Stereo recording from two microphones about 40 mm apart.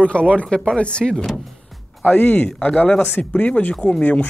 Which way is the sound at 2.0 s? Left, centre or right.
Left.